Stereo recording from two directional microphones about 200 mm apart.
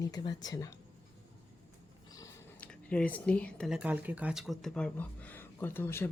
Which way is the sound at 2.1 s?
10° left (ahead or behind).